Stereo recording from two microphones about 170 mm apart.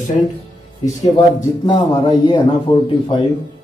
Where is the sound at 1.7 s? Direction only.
25° left (ahead or behind).